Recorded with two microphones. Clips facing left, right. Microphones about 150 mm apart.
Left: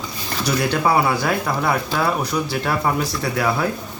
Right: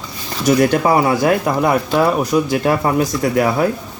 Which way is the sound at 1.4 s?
20° right (ahead or behind).